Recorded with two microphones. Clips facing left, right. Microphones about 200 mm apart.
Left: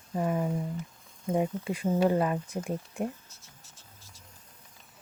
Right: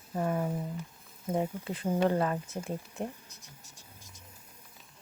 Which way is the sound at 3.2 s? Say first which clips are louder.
Right 2 dB; 15° right (ahead or behind).